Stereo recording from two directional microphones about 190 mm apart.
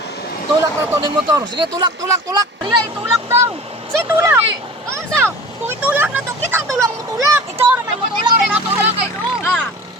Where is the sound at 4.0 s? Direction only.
15° right (ahead or behind).